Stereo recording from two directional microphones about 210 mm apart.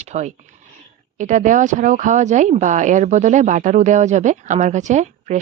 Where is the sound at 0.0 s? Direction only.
35° right (ahead or behind).